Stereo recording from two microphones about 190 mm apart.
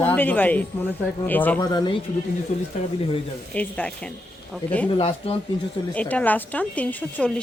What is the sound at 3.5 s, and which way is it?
Speech, 5° left (ahead or behind).